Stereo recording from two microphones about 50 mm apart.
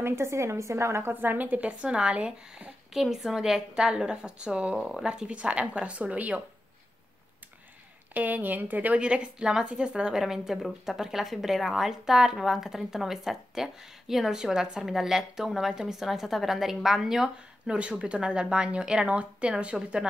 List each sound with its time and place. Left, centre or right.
0.0 s a woman's voice: right
1.1 s speech: right
2.9 s a woman's voice: centre; by 6.4 s right
8.1 s speech: right
9.0 s a woman's voice: right
17.7 s speech: right